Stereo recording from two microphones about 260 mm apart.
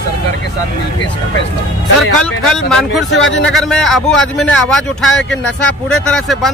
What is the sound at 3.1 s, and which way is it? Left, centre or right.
Speech, left.